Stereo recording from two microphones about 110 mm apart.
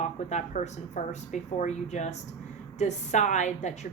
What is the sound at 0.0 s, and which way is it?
Speech, 90° left.